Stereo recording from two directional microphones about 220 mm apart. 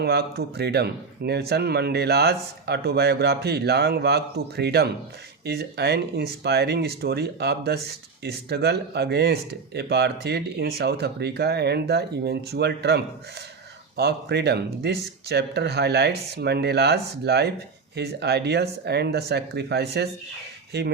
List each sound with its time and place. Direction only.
0.0 s speech: 45° right (ahead or behind)